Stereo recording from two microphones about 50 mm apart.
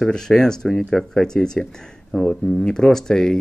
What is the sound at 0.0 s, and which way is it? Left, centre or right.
Speech, centre.